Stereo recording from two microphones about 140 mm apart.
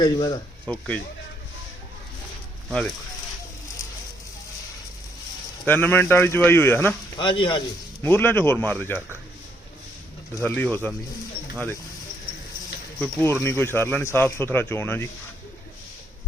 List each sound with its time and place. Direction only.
0.0 s speech: 30° left (ahead or behind)
0.7 s speech: 10° left (ahead or behind)
2.6 s speech: 5° left (ahead or behind)
5.6 s speech: 15° left (ahead or behind)
7.2 s speech: 35° left (ahead or behind)
8.0 s speech: 15° left (ahead or behind)
10.4 s speech: 10° left (ahead or behind)
13.0 s speech: 15° left (ahead or behind)